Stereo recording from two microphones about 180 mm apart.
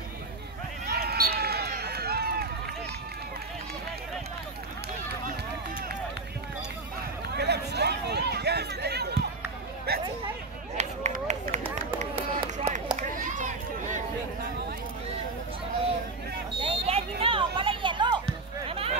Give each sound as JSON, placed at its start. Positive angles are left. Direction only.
{"t": 0.8, "sound": "run", "side_deg": -60}
{"t": 7.3, "sound": "run", "side_deg": -65}
{"t": 9.9, "sound": "chatter", "side_deg": -60}
{"t": 10.8, "sound": "run", "side_deg": -40}
{"t": 12.9, "sound": "a sound", "side_deg": -45}
{"t": 16.6, "sound": "a sound", "side_deg": -35}